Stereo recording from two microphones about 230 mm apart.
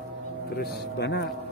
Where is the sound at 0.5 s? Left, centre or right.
Left.